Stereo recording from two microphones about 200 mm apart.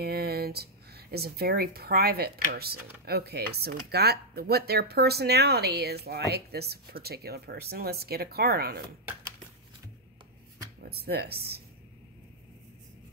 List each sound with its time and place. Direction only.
0.0 s speech: 50° right (ahead or behind)
10.8 s speech: 50° right (ahead or behind)